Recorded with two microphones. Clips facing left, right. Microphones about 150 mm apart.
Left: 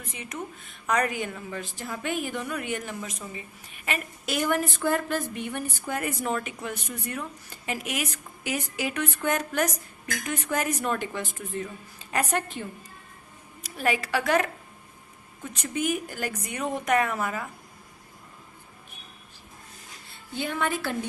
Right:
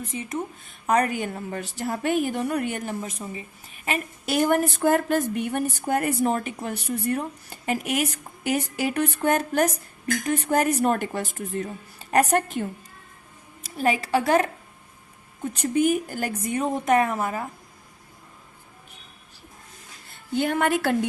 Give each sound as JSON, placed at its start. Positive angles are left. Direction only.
{"t": 0.1, "sound": "speech", "side_deg": -25}
{"t": 0.9, "sound": "a woman's voice", "side_deg": -35}
{"t": 13.7, "sound": "a woman's voice", "side_deg": -35}
{"t": 15.6, "sound": "a woman's voice", "side_deg": -35}
{"t": 20.4, "sound": "a woman's voice", "side_deg": -50}